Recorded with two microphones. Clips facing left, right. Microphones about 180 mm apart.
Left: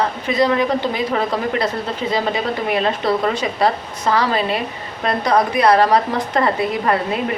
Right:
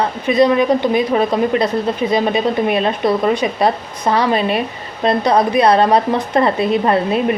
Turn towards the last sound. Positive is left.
turn(degrees=-25)  # may be behind; listen again after turning